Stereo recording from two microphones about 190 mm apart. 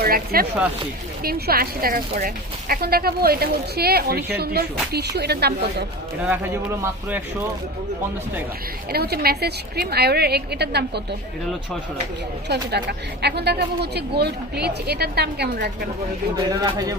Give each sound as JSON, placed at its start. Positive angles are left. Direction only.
{"t": 0.0, "sound": "speech", "side_deg": -50}
{"t": 6.2, "sound": "speech", "side_deg": -10}
{"t": 8.9, "sound": "speech", "side_deg": -55}
{"t": 12.5, "sound": "speech", "side_deg": -60}
{"t": 16.5, "sound": "speech", "side_deg": -20}